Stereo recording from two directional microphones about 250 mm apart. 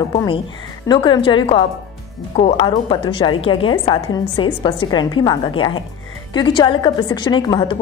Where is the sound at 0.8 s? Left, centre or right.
Centre.